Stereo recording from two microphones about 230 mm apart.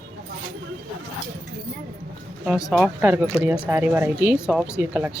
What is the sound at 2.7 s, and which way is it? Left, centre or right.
Speech, centre.